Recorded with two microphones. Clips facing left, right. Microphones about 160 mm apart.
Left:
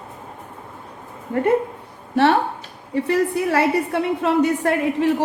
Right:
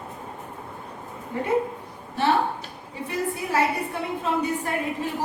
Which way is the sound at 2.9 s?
75° left (ahead or behind).